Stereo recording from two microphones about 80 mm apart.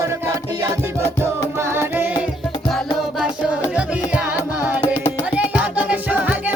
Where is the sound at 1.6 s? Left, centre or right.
Right.